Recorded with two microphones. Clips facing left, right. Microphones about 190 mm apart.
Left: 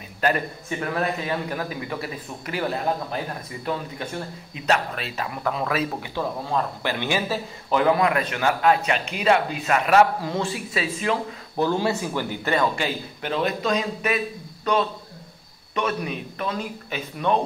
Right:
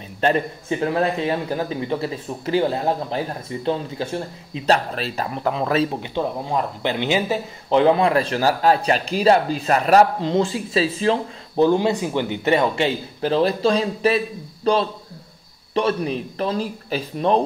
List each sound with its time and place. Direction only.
0.2 s a man's voice: 25° right (ahead or behind)
10.2 s a man's voice: 25° right (ahead or behind)
11.5 s a man's voice: 20° right (ahead or behind)